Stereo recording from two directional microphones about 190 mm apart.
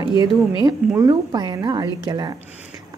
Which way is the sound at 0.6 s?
20° right (ahead or behind).